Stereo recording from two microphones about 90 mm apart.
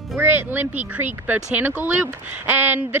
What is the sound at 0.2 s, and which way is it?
Speech, 20° right (ahead or behind).